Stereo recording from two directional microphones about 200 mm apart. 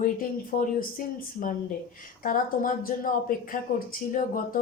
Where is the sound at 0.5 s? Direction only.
40° left (ahead or behind).